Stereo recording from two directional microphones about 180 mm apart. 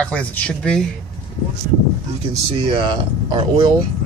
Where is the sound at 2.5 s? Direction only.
30° right (ahead or behind).